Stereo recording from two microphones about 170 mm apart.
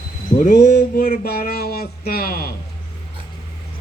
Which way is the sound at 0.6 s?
50° left (ahead or behind).